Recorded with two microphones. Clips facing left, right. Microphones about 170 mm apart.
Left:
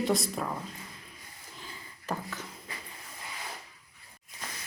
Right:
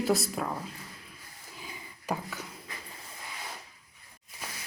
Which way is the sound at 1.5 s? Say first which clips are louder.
Right 2 dB; 10° right (ahead or behind).